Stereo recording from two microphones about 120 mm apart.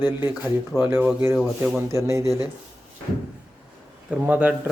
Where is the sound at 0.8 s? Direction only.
15° right (ahead or behind).